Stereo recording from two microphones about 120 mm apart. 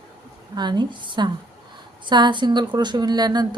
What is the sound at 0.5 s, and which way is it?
Speech, 35° right (ahead or behind).